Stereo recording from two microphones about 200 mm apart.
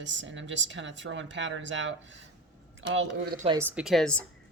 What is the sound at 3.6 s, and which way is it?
Speech, 5° right (ahead or behind).